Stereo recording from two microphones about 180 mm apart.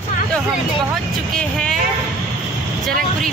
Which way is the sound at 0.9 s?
5° left (ahead or behind).